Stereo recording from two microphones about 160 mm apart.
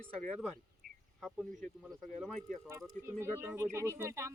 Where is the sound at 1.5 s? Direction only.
55° right (ahead or behind).